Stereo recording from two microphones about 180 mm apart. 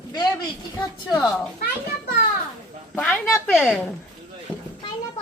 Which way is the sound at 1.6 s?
60° left (ahead or behind).